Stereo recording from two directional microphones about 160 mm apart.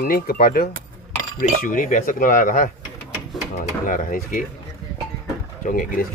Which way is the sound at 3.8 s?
55° left (ahead or behind).